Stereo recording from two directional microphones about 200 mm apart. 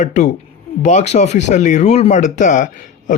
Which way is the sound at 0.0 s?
35° left (ahead or behind).